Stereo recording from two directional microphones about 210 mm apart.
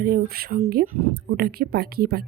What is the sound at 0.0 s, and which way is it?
A woman's voice, 45° right (ahead or behind).